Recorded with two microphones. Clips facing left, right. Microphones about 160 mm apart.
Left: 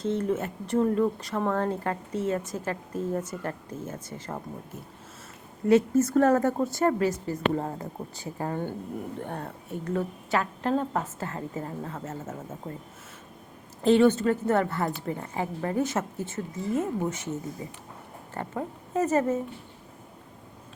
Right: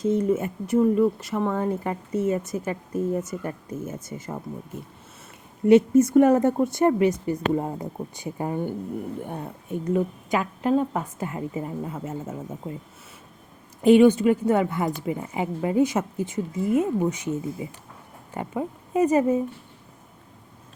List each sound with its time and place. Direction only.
0.1 s a woman's voice: 10° right (ahead or behind)
5.6 s a woman's voice: 20° right (ahead or behind)
13.8 s a woman's voice: 15° right (ahead or behind)